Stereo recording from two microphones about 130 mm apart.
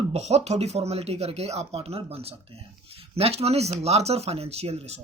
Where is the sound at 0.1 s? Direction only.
55° right (ahead or behind).